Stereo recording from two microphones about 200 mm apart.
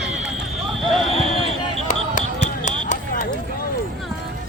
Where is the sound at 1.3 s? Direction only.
25° right (ahead or behind).